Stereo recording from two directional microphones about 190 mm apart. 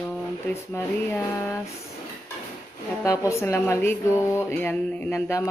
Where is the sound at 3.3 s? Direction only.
15° left (ahead or behind).